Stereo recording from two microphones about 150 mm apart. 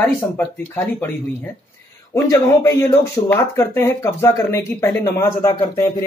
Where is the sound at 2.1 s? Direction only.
20° left (ahead or behind).